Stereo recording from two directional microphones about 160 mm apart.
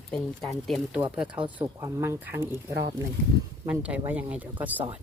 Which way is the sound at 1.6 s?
20° right (ahead or behind).